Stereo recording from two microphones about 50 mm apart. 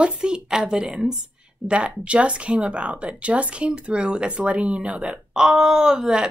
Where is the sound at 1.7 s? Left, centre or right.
Right.